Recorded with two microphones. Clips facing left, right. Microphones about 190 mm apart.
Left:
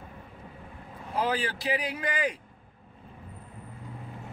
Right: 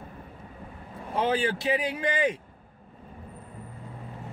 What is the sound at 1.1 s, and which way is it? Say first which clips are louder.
A man's voice: right 3 dB; 25° right (ahead or behind).